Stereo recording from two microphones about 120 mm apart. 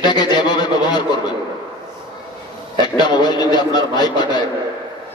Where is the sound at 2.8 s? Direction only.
35° left (ahead or behind).